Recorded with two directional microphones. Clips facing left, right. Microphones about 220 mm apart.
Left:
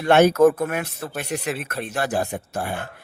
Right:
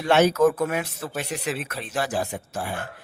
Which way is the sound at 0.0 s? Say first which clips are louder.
Left 4 dB; 55° left (ahead or behind).